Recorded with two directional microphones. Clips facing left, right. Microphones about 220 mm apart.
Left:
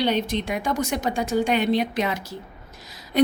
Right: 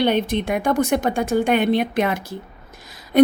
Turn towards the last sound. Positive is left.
turn(degrees=-55)  # may be behind; listen again after turning